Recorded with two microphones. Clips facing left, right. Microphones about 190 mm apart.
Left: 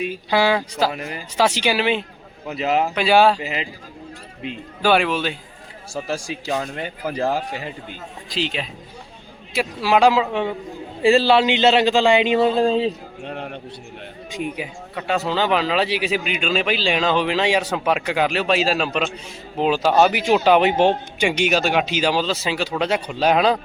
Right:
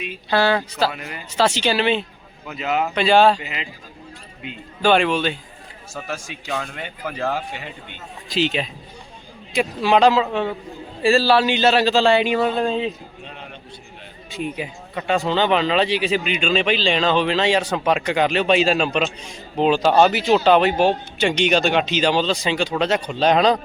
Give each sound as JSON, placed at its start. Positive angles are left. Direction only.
{"t": 0.3, "sound": "speech", "side_deg": 10}
{"t": 0.9, "sound": "speech", "side_deg": 35}
{"t": 1.4, "sound": "speech", "side_deg": 10}
{"t": 2.5, "sound": "speech", "side_deg": 35}
{"t": 2.9, "sound": "speech", "side_deg": 10}
{"t": 3.4, "sound": "speech", "side_deg": 35}
{"t": 4.8, "sound": "speech", "side_deg": 5}
{"t": 6.0, "sound": "speech", "side_deg": 30}
{"t": 8.3, "sound": "a man's voice", "side_deg": 0}
{"t": 13.2, "sound": "a sound", "side_deg": 60}
{"t": 14.3, "sound": "speech", "side_deg": 15}
{"t": 21.2, "sound": "speech", "side_deg": 10}